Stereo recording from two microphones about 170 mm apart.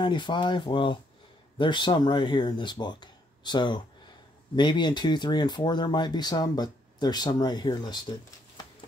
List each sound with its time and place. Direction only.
0.0 s speech: 25° left (ahead or behind)